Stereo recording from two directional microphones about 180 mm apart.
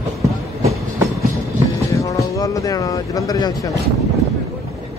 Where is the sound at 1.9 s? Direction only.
20° left (ahead or behind).